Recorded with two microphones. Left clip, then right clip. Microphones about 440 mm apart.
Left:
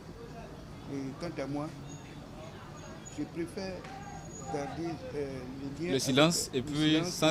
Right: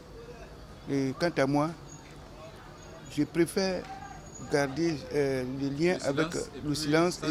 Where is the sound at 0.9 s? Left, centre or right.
Right.